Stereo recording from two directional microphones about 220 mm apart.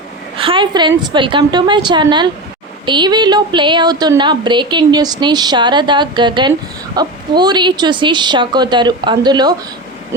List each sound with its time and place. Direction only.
0.3 s speech: 25° right (ahead or behind)